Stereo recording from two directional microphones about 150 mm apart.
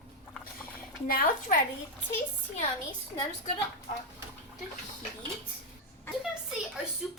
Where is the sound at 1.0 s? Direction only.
85° left.